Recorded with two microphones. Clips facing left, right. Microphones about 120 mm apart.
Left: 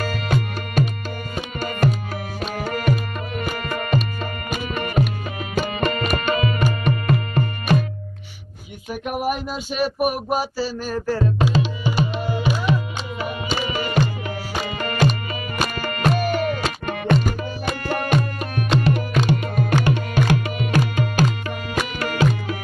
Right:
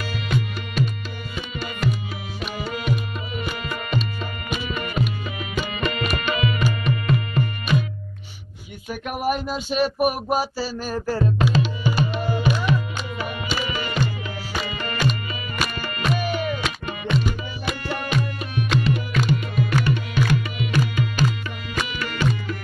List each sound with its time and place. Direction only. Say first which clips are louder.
0.0 s music: left 3 dB; 45° left (ahead or behind)
1.3 s tabla: left 4 dB; 50° left (ahead or behind)
2.5 s music: left 4 dB; 50° left (ahead or behind)
9.0 s a sound: even; 10° left (ahead or behind)
11.5 s tabla: left 1 dB; 30° left (ahead or behind)
12.2 s music: even; 10° left (ahead or behind)
13.2 s tabla: left 3 dB; 35° left (ahead or behind)
14.6 s music: left 6 dB; 50° left (ahead or behind)
15.0 s music: left 2 dB; 40° left (ahead or behind)
15.7 s music: left 5 dB; 55° left (ahead or behind)
20.4 s tabla: left 2 dB; 50° left (ahead or behind)
21.7 s music: left 4 dB; 50° left (ahead or behind)